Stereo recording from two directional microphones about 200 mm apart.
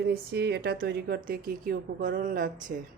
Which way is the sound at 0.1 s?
55° right (ahead or behind).